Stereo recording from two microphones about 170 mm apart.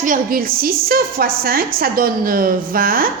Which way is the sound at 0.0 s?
55° right (ahead or behind).